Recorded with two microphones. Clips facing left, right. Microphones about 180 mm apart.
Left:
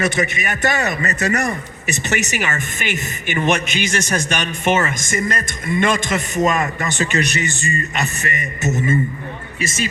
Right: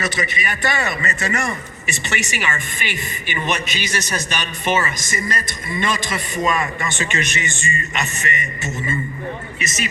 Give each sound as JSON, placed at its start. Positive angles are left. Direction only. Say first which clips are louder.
{"t": 0.0, "sound": "a man's voice", "louder": "left 4 dB", "side_deg": 50}
{"t": 9.6, "sound": "a man's voice", "louder": "left 3 dB", "side_deg": 30}